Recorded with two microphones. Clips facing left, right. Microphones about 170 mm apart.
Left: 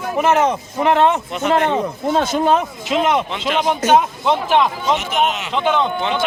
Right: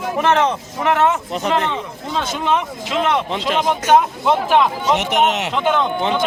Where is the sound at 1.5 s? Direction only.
45° left (ahead or behind).